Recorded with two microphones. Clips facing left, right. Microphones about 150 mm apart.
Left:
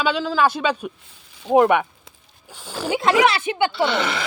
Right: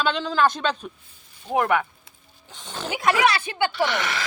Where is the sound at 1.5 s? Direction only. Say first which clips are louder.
Left 6 dB; 20° left (ahead or behind).